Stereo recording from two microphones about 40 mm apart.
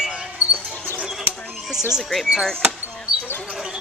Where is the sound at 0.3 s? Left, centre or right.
Right.